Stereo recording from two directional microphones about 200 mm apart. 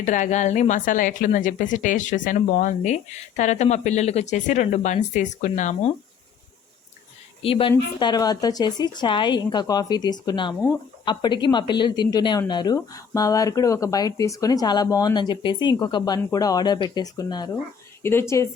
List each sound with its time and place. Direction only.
0.0 s a woman's voice: 40° left (ahead or behind)
7.4 s speech: 25° left (ahead or behind)